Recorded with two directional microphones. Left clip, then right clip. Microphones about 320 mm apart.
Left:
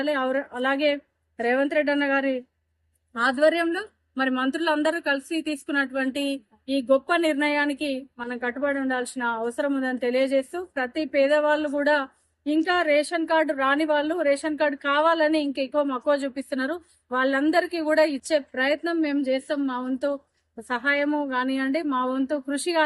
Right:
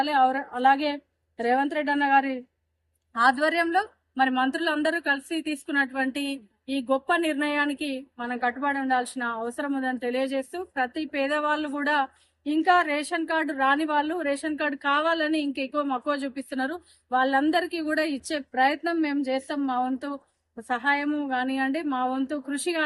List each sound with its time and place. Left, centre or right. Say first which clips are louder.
0.0 s a woman's voice: right 3 dB; centre
18.0 s speech: left 6 dB; right
18.3 s a woman's voice: right 1 dB; centre